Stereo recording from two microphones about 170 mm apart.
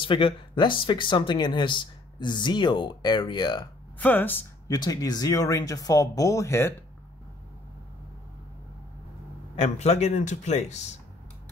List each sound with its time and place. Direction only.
0.0 s speech: 30° left (ahead or behind)
4.0 s speech: 10° left (ahead or behind)
4.6 s speech: 25° left (ahead or behind)
9.6 s speech: 40° left (ahead or behind)